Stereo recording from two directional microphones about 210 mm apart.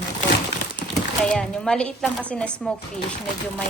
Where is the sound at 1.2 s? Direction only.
5° left (ahead or behind).